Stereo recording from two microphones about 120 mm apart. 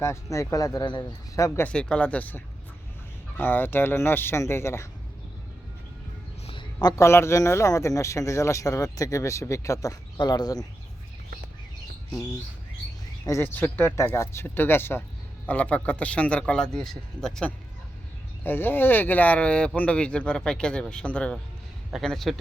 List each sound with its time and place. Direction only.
0.0 s speech: 25° left (ahead or behind)
1.6 s speech: 10° left (ahead or behind)
6.8 s speech: 25° left (ahead or behind)
13.4 s speech: 15° left (ahead or behind)
18.4 s speech: 15° left (ahead or behind)